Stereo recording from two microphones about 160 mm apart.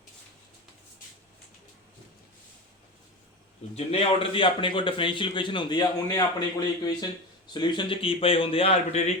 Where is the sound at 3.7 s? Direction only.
35° left (ahead or behind).